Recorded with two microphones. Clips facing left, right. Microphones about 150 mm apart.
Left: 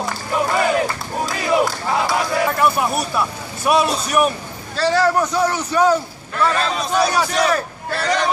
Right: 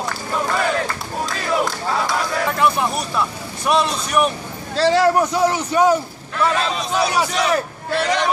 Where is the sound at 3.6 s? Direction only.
5° left (ahead or behind).